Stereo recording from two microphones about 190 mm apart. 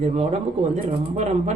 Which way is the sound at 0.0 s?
35° right (ahead or behind).